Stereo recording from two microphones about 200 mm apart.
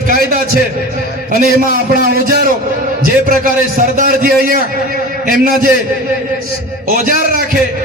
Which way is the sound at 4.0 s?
45° right (ahead or behind).